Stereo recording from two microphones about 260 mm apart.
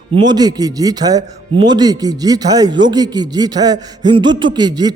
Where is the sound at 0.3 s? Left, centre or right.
Centre.